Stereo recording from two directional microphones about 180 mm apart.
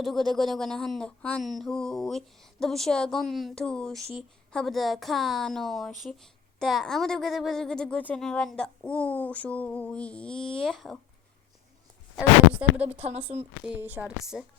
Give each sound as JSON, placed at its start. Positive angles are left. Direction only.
{"t": 0.0, "sound": "speech", "side_deg": 0}
{"t": 12.1, "sound": "speech", "side_deg": -10}
{"t": 13.1, "sound": "speech", "side_deg": -35}
{"t": 13.7, "sound": "speech", "side_deg": -10}